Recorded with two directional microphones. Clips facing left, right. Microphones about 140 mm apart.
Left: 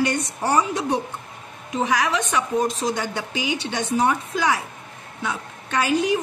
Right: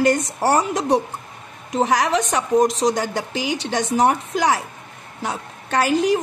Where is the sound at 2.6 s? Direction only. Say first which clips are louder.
Right 8 dB; 90° right.